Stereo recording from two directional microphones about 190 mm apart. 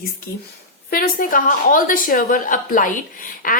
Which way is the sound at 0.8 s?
50° left (ahead or behind).